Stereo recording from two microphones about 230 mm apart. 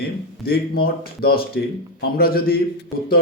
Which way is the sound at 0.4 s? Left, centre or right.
Left.